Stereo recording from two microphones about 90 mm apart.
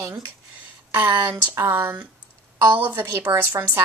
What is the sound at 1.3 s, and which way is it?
Speech, 20° right (ahead or behind).